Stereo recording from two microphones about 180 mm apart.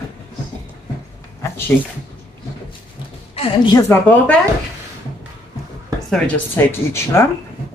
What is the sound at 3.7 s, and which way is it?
Speech, 10° left (ahead or behind).